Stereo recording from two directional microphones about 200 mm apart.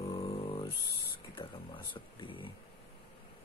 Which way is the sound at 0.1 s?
30° left (ahead or behind).